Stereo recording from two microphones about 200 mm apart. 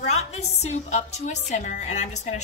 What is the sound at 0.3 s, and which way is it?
Music, 35° left (ahead or behind).